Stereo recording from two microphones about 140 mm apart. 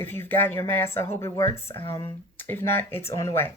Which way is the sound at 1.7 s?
35° left (ahead or behind).